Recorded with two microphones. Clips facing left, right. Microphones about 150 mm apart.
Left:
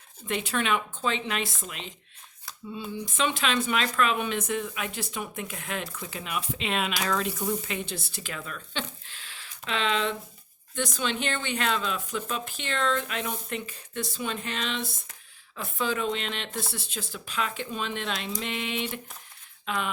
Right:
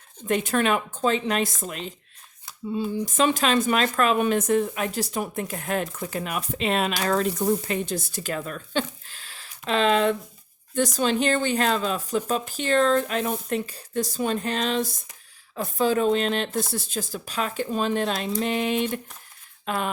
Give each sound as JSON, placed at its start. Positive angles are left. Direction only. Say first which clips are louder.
{"t": 0.3, "sound": "speech", "louder": "right 5 dB", "side_deg": -45}